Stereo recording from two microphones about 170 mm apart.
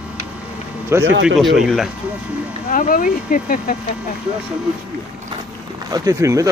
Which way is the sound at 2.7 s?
50° left (ahead or behind).